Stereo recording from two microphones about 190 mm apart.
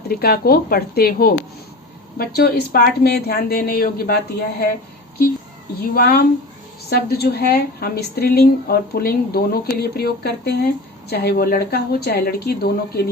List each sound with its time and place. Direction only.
0.1 s speech: 55° left (ahead or behind)
5.8 s a woman's voice: 55° left (ahead or behind)